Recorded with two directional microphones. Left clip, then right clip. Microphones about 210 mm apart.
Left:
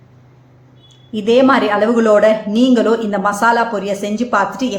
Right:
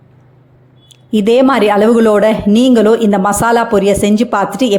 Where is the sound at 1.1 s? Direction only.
40° right (ahead or behind).